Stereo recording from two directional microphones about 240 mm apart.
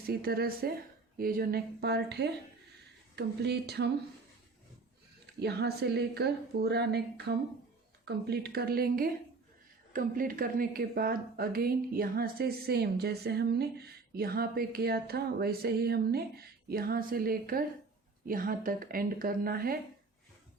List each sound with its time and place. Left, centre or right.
0.0 s a woman's voice: right
5.2 s a woman's voice: right